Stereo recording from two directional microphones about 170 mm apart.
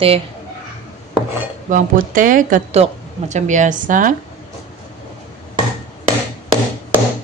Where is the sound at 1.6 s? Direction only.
50° right (ahead or behind).